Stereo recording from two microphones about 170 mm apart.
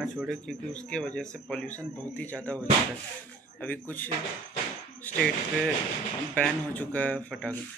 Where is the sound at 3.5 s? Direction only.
10° left (ahead or behind).